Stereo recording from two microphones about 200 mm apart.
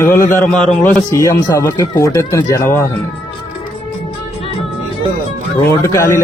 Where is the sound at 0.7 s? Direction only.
15° left (ahead or behind).